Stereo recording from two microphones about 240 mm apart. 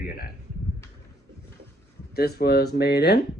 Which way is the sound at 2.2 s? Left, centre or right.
Left.